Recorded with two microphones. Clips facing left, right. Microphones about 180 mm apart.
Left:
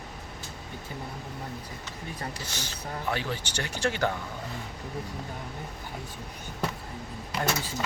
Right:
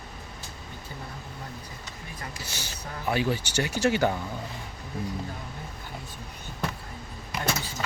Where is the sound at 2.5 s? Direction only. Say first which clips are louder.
Left 2 dB; 10° right (ahead or behind).